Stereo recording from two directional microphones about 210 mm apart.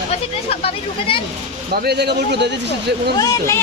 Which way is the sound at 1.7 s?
50° right (ahead or behind).